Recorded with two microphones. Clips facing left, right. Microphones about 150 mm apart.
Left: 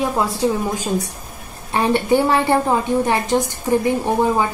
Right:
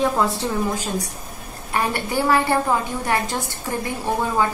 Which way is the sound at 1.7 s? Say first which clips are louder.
Left 7 dB; 25° left (ahead or behind).